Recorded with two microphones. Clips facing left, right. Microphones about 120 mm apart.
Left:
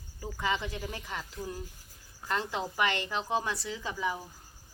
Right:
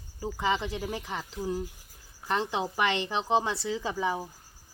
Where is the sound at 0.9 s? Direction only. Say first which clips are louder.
Right 4 dB; 30° right (ahead or behind).